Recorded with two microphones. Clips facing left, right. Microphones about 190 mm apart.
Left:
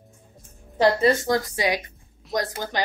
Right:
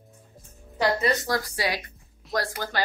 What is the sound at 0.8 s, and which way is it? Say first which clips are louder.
A woman's voice: left 5 dB; 25° left (ahead or behind).